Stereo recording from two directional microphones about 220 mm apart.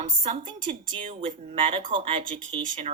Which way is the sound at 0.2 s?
30° right (ahead or behind).